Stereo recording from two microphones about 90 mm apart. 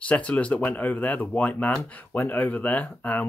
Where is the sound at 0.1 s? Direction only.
15° left (ahead or behind).